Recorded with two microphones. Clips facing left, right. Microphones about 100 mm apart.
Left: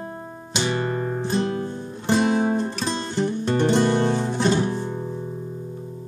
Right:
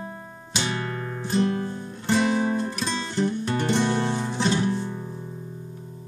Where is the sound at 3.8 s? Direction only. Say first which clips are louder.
Left 4 dB; 20° left (ahead or behind).